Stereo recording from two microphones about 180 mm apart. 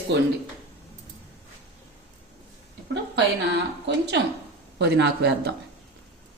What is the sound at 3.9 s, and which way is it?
Speech, 70° right (ahead or behind).